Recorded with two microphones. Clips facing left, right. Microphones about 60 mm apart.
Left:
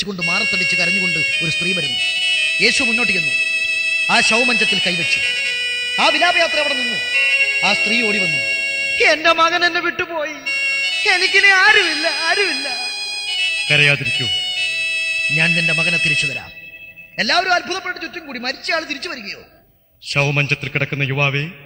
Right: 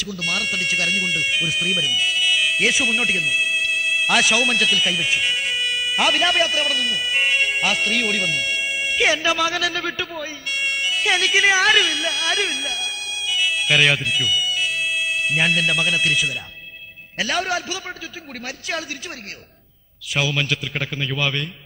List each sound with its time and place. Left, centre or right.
0.0 s speech: left
2.0 s music: centre
2.6 s speech: left
3.7 s music: centre
4.1 s speech: left
13.0 s music: centre
13.7 s a man's voice: left
15.2 s speech: left
20.2 s a man's voice: left